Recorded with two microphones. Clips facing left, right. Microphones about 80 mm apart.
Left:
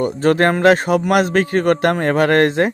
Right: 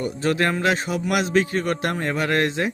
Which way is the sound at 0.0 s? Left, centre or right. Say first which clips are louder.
Left 7 dB; left.